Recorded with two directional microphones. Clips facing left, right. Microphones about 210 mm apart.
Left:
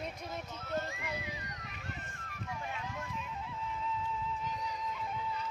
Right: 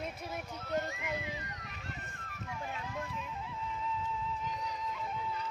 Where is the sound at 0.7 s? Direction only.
Centre (ahead or behind).